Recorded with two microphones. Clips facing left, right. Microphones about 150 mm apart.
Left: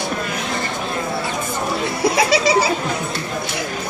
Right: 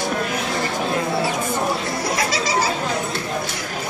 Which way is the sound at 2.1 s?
65° left (ahead or behind).